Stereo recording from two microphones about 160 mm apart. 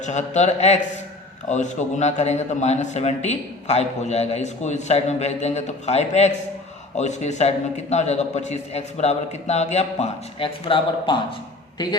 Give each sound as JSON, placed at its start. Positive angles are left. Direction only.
{"t": 0.0, "sound": "a man's voice", "side_deg": 45}